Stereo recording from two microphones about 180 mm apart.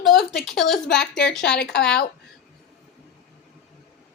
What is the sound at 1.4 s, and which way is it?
Speech, 70° left (ahead or behind).